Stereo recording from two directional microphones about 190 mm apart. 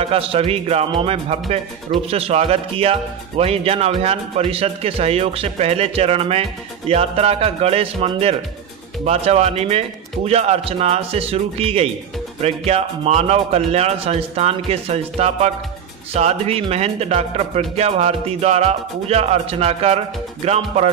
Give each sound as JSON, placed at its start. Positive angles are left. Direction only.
{"t": 0.0, "sound": "speech", "side_deg": -30}